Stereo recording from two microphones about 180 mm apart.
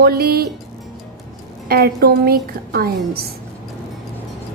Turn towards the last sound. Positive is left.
turn(degrees=-55)  # may be behind; listen again after turning